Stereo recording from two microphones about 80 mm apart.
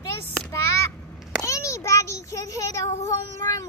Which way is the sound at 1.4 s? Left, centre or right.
Left.